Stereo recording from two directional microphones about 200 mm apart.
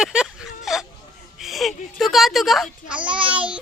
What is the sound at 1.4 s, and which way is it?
Baby cry, centre (ahead or behind).